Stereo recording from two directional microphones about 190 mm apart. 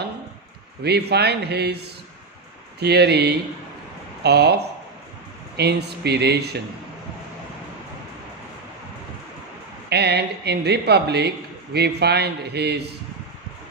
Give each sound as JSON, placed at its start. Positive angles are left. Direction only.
{"t": 0.8, "sound": "a man's voice", "side_deg": -60}
{"t": 2.8, "sound": "a man's voice", "side_deg": -60}
{"t": 5.6, "sound": "a man's voice", "side_deg": -60}
{"t": 9.8, "sound": "a man's voice", "side_deg": -60}